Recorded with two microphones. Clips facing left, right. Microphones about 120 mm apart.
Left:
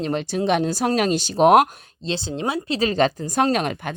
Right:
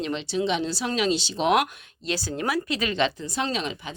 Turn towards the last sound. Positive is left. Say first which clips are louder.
# left 7 dB
turn(degrees=55)  # may be behind; listen again after turning